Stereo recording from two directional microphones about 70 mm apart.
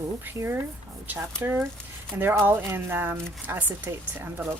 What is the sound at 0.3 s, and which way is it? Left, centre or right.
Speech, right.